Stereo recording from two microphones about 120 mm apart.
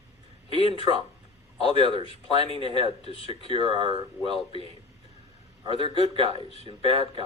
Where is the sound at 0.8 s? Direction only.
45° right (ahead or behind).